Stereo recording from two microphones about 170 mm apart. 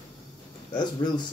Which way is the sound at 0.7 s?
25° left (ahead or behind).